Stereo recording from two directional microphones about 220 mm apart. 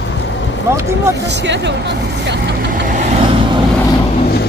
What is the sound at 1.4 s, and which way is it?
Speech, 55° right (ahead or behind).